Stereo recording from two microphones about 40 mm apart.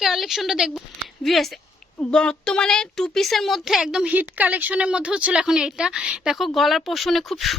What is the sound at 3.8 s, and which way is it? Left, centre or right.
Speech, centre.